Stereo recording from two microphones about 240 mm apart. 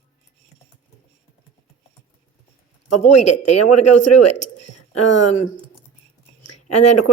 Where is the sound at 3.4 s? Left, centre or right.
Left.